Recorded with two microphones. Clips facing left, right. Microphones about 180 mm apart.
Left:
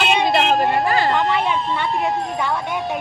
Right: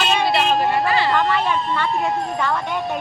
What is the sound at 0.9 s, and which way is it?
Vehicle, 45° left (ahead or behind).